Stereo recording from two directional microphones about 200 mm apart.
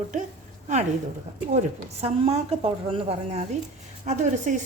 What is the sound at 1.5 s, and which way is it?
A woman's voice, 35° right (ahead or behind).